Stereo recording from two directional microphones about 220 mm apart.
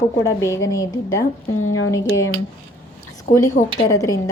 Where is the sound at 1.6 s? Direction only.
70° left (ahead or behind).